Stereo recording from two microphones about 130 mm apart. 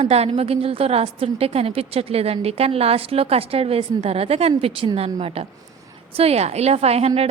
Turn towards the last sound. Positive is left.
turn(degrees=-55)  # may be behind; listen again after turning